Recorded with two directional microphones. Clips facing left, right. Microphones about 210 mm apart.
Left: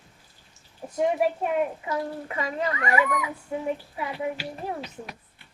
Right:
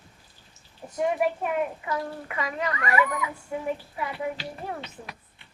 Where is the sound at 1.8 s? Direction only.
25° left (ahead or behind).